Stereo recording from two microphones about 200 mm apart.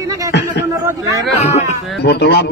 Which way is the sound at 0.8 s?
15° right (ahead or behind).